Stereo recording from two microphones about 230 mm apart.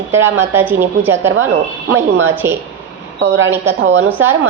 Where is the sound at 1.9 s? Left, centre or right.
Right.